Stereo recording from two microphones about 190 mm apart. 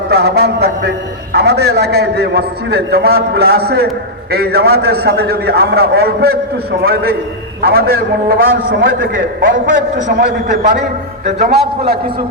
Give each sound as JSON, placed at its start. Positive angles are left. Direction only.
{"t": 0.1, "sound": "a man's voice", "side_deg": -55}
{"t": 9.6, "sound": "a man's voice", "side_deg": -75}
{"t": 11.3, "sound": "a man's voice", "side_deg": -55}